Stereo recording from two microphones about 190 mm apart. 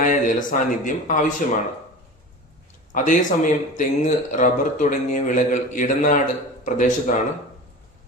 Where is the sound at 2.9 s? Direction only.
45° left (ahead or behind).